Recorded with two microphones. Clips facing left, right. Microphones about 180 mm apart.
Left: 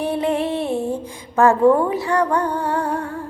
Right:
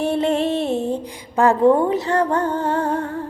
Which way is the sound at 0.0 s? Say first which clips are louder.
Right 1 dB; 25° right (ahead or behind).